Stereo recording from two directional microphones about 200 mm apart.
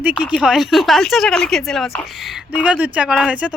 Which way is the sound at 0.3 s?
Centre (ahead or behind).